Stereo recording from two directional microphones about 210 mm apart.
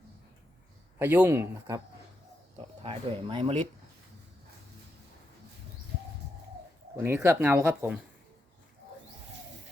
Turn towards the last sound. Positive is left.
turn(degrees=-10)  # may be behind; listen again after turning